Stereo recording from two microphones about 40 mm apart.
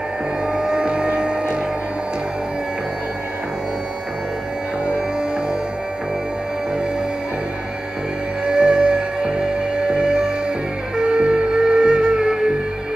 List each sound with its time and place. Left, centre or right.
0.5 s music: centre
8.5 s music: right